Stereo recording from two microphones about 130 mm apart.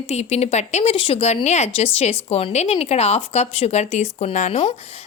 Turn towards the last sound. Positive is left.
turn(degrees=55)  # may be behind; listen again after turning